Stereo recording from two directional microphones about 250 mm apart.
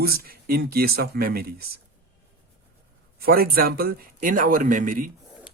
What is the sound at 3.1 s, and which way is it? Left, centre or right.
Speech, right.